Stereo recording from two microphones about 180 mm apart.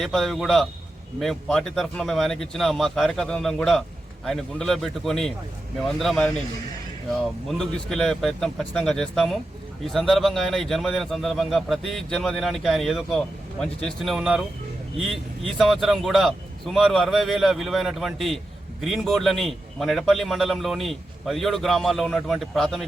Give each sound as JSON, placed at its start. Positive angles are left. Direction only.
{"t": 0.0, "sound": "a man's voice", "side_deg": 0}